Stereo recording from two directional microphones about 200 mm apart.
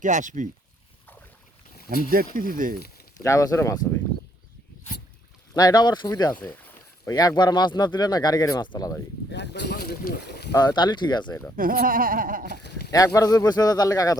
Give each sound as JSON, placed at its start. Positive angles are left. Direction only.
{"t": 0.0, "sound": "speech", "side_deg": -40}
{"t": 2.0, "sound": "a sound", "side_deg": -45}
{"t": 3.2, "sound": "speech", "side_deg": 15}
{"t": 5.5, "sound": "speech", "side_deg": 20}
{"t": 9.3, "sound": "speech", "side_deg": 60}
{"t": 10.5, "sound": "speech", "side_deg": 20}
{"t": 11.5, "sound": "a sound", "side_deg": -45}
{"t": 12.5, "sound": "a sound", "side_deg": 60}
{"t": 13.1, "sound": "speech", "side_deg": 20}